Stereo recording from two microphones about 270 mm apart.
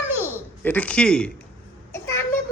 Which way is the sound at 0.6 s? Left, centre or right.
Centre.